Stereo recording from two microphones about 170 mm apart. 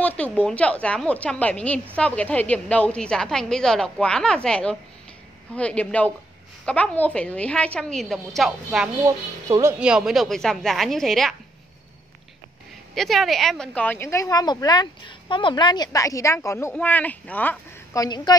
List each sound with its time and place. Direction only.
0.0 s a woman's voice: 10° left (ahead or behind)
9.0 s speech: 15° right (ahead or behind)
9.8 s a woman's voice: 5° right (ahead or behind)
12.9 s a woman's voice: centre (ahead or behind)
18.0 s speech: 25° left (ahead or behind)